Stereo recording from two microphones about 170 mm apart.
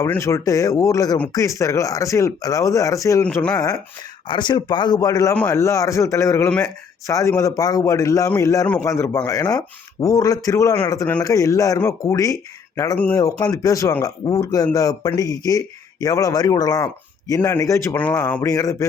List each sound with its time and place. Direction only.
0.0 s speech: 15° left (ahead or behind)
3.2 s speech: 5° left (ahead or behind)
4.3 s speech: 25° left (ahead or behind); by 18.4 s 10° left (ahead or behind)
18.4 s speech: 20° left (ahead or behind)